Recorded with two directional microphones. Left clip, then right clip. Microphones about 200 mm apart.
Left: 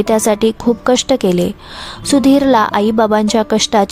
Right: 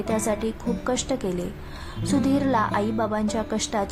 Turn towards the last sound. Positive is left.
turn(degrees=40)  # may be behind; listen again after turning